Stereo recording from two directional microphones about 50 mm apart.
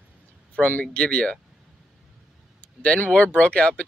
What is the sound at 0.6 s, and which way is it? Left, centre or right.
Speech, left.